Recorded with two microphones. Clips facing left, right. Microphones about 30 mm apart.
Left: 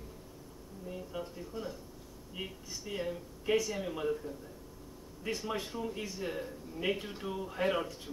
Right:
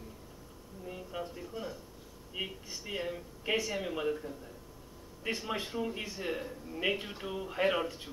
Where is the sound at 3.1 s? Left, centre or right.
Right.